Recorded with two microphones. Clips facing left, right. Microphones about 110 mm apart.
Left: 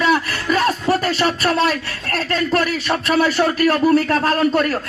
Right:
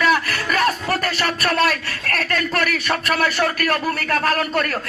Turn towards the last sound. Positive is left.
turn(degrees=25)  # may be behind; listen again after turning